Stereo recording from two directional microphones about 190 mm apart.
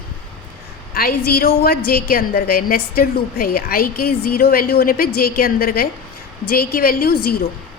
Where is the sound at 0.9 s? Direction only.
50° left (ahead or behind).